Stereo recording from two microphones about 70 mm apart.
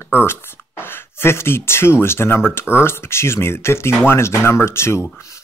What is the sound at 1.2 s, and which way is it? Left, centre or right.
Speech, left.